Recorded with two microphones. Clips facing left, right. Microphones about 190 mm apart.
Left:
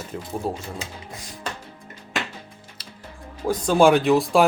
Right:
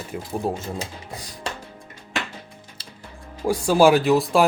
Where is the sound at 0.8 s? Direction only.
35° right (ahead or behind).